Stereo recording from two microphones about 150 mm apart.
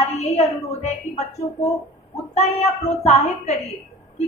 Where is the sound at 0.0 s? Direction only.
45° left (ahead or behind).